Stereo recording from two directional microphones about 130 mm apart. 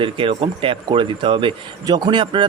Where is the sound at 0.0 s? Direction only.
45° right (ahead or behind).